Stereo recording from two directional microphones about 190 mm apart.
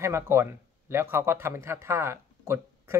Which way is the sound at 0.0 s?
15° right (ahead or behind).